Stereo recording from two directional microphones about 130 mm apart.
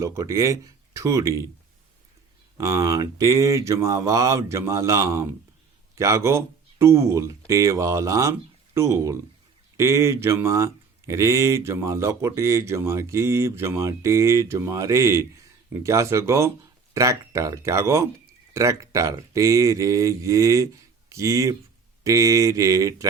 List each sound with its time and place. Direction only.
0.0 s speech: 25° right (ahead or behind)
2.6 s speech: 25° right (ahead or behind)